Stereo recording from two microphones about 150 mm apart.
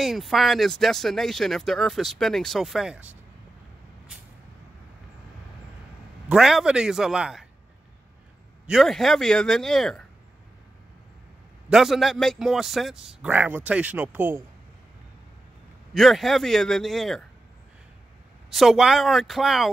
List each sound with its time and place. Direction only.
0.0 s speech: centre (ahead or behind)
6.2 s speech: 5° right (ahead or behind)
8.6 s speech: centre (ahead or behind)
11.7 s speech: centre (ahead or behind)
15.9 s speech: centre (ahead or behind)
18.5 s speech: centre (ahead or behind)